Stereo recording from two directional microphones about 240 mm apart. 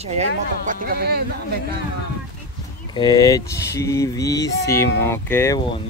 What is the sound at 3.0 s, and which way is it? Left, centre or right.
Speech, centre.